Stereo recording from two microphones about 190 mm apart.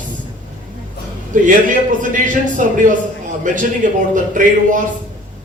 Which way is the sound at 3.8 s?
40° right (ahead or behind).